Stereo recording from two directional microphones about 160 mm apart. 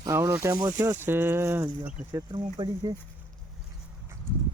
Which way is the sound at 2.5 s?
30° right (ahead or behind).